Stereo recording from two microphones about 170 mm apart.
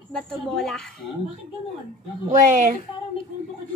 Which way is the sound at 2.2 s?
45° right (ahead or behind).